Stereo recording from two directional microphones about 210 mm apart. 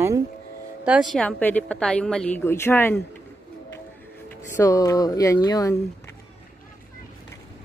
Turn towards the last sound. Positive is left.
turn(degrees=15)  # may be behind; listen again after turning